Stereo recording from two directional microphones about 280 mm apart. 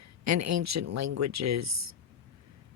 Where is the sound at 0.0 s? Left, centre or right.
Right.